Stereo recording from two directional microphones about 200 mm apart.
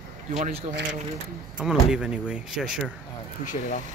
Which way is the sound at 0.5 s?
30° right (ahead or behind).